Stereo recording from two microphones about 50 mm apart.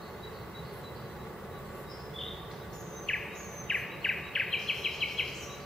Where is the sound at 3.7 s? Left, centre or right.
Centre.